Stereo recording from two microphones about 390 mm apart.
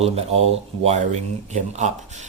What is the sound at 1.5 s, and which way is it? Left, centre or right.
Speech, centre.